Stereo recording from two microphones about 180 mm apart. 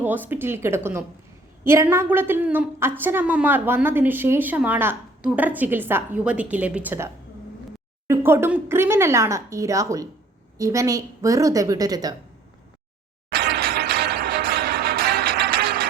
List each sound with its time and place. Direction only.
0.0 s a woman's voice: 10° right (ahead or behind)
13.3 s music: 55° right (ahead or behind)